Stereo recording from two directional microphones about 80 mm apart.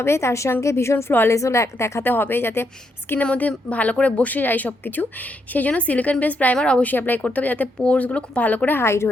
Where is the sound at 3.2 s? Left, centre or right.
Centre.